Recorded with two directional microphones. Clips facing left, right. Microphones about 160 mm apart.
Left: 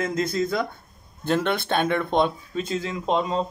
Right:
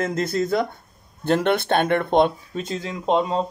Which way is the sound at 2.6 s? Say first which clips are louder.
Left 1 dB; 35° right (ahead or behind).